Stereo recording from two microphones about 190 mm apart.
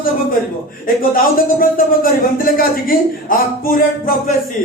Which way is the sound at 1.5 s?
50° left (ahead or behind).